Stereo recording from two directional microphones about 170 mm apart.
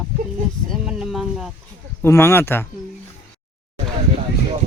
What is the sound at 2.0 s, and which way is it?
Speech, 15° left (ahead or behind).